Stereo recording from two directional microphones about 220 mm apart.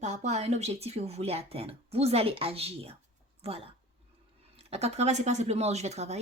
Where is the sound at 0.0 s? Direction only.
30° right (ahead or behind).